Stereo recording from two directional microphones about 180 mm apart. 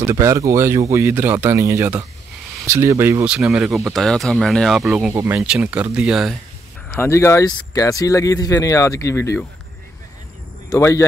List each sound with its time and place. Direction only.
0.0 s speech: 15° right (ahead or behind)
6.9 s speech: 15° left (ahead or behind)
10.7 s speech: 15° left (ahead or behind)